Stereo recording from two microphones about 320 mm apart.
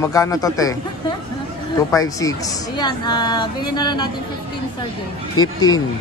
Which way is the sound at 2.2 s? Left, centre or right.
Centre.